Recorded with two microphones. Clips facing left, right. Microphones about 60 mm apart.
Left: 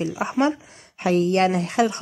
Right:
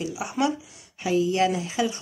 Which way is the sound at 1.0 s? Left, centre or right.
Left.